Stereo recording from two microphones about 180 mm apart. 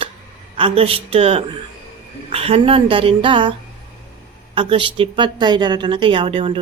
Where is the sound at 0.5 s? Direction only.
30° right (ahead or behind).